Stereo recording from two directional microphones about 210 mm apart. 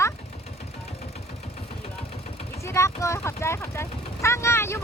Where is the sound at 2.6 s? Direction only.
15° left (ahead or behind).